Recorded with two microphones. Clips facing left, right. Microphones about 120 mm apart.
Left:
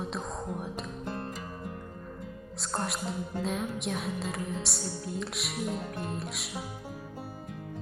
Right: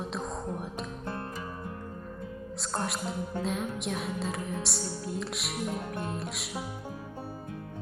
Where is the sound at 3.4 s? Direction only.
Centre (ahead or behind).